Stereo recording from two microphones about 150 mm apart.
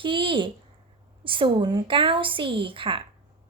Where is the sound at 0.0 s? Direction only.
35° right (ahead or behind).